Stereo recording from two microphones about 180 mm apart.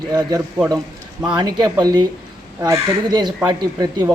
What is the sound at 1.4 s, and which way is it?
A man's voice, 25° right (ahead or behind).